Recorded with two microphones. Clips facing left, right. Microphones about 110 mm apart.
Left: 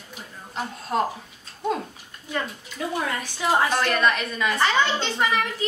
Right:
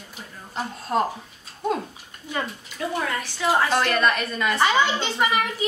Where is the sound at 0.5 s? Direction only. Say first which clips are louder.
Right 1 dB; centre (ahead or behind).